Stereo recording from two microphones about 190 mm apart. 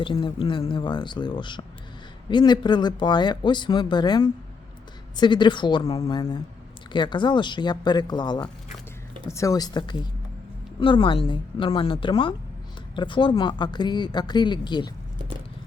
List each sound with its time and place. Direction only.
0.0 s speech: 25° left (ahead or behind)